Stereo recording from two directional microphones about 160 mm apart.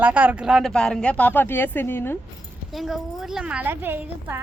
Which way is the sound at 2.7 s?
Centre (ahead or behind).